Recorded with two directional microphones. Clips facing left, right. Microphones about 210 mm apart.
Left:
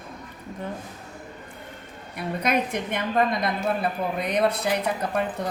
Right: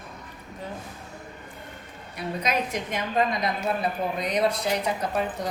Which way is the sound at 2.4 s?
55° left (ahead or behind).